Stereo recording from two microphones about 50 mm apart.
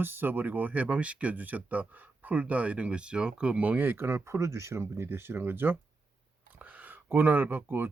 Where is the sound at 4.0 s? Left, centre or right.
Right.